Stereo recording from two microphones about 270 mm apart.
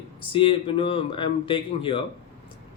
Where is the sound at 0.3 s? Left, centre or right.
Centre.